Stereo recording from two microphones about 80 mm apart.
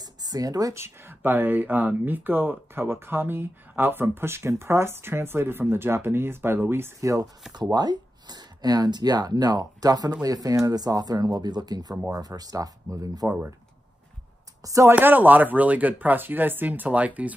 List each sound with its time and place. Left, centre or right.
0.0 s a sound: right
0.8 s speech: right
7.7 s speech: right
14.6 s speech: right
14.9 s speech: right